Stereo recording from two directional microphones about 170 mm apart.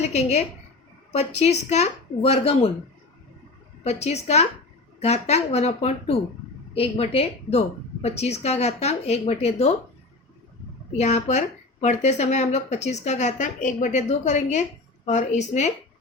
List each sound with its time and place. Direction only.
0.0 s speech: 40° left (ahead or behind)
3.8 s speech: 40° left (ahead or behind)
10.9 s speech: 40° left (ahead or behind)